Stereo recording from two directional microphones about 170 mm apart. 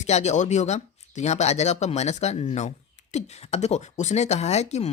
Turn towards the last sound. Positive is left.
turn(degrees=40)  # may be behind; listen again after turning